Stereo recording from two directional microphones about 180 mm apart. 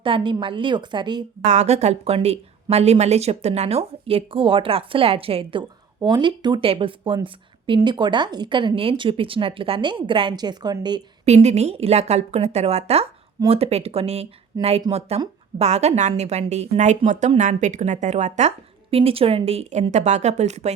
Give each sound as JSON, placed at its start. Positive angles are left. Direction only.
{"t": 0.0, "sound": "speech", "side_deg": -25}
{"t": 1.5, "sound": "a woman's voice", "side_deg": -40}
{"t": 11.3, "sound": "a woman's voice", "side_deg": -35}